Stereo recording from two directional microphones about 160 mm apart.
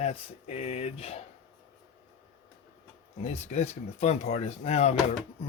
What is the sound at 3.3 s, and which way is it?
Speech, 45° left (ahead or behind).